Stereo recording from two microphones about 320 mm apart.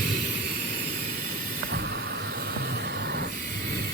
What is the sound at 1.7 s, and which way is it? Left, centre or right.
Vehicle, right.